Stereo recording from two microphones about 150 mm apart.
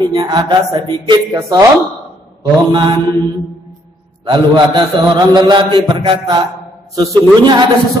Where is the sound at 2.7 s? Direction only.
30° right (ahead or behind).